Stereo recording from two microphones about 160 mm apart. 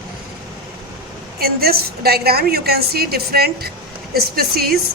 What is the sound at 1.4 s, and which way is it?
A woman's voice, 75° right (ahead or behind).